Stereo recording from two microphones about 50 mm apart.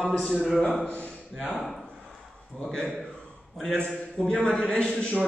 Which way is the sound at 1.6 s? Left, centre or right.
Centre.